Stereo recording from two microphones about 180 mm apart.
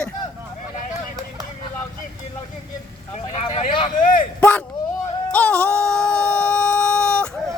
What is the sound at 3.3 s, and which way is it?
Speech, 35° left (ahead or behind).